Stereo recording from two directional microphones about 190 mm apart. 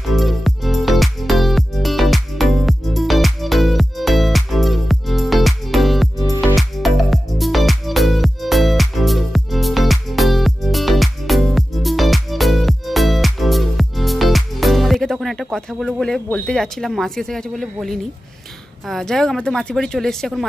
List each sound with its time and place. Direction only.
0.0 s music: centre (ahead or behind)
18.9 s speech: centre (ahead or behind)